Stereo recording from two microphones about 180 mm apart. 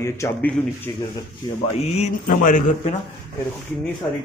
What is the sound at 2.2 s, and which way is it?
Speech, 50° left (ahead or behind).